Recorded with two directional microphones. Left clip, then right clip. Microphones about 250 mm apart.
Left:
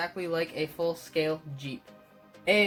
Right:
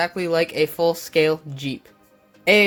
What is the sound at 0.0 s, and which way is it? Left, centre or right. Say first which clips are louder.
Speech: right 10 dB; right.